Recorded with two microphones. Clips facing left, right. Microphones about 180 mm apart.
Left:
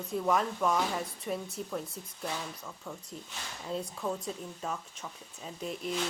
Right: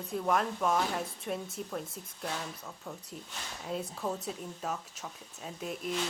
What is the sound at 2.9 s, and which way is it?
Speech, 15° right (ahead or behind).